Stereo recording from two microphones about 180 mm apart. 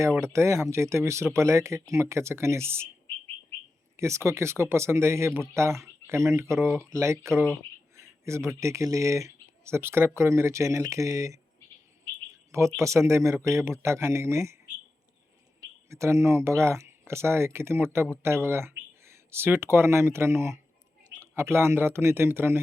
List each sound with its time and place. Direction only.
0.2 s speech: 15° right (ahead or behind)
3.9 s speech: 15° right (ahead or behind)
7.5 s a sound: 15° right (ahead or behind)
8.6 s speech: 15° right (ahead or behind)
12.5 s speech: 15° right (ahead or behind)
15.9 s speech: 15° right (ahead or behind)